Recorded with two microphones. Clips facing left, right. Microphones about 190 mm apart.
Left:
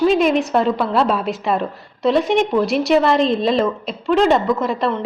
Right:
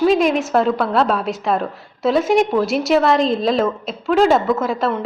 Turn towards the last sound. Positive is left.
turn(degrees=0)  # may be behind; listen again after turning